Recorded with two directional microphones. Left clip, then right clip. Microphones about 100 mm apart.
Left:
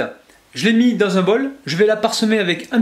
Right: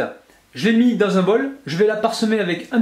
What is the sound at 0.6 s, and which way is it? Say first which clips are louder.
Speech: left 1 dB; 40° left (ahead or behind).